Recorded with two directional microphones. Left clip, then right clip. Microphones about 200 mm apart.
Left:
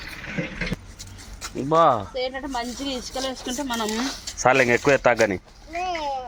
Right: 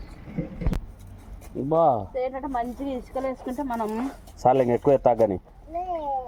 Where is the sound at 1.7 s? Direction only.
20° left (ahead or behind).